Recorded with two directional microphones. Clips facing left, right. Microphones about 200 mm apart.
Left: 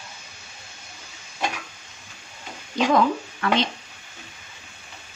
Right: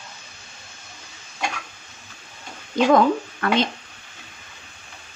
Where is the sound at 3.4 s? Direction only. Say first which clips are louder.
Right 1 dB; 55° right (ahead or behind).